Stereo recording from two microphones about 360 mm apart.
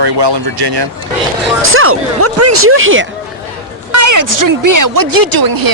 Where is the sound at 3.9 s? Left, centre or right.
Right.